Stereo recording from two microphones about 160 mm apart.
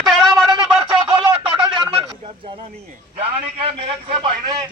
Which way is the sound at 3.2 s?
35° right (ahead or behind).